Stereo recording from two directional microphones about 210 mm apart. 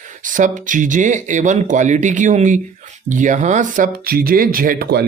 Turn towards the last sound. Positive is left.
turn(degrees=-50)  # may be behind; listen again after turning